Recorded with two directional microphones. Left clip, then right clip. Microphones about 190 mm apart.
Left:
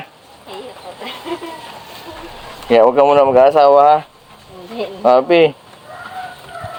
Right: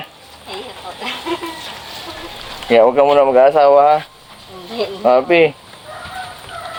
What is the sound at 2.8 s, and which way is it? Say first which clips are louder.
Speech: left 1 dB; 10° left (ahead or behind).